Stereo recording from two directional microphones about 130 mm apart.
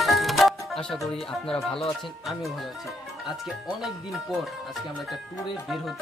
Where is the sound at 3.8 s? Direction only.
Centre (ahead or behind).